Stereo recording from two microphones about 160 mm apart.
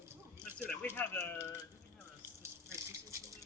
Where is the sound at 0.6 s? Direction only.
10° left (ahead or behind).